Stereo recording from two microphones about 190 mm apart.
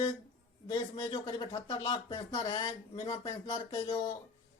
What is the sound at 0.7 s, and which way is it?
Speech, 25° left (ahead or behind).